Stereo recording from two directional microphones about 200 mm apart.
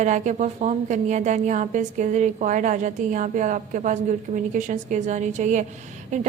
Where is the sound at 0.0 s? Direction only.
35° right (ahead or behind).